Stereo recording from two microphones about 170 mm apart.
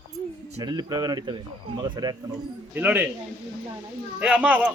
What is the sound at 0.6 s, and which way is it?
Speech, 25° right (ahead or behind).